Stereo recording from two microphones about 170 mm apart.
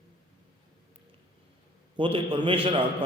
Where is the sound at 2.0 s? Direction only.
30° right (ahead or behind).